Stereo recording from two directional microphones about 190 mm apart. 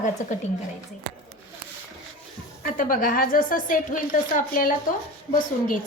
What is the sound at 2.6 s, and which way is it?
A woman's voice, 45° left (ahead or behind).